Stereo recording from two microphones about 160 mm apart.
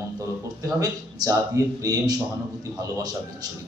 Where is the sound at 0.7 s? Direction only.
20° right (ahead or behind).